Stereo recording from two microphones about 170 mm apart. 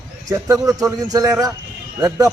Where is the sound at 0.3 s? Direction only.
20° right (ahead or behind).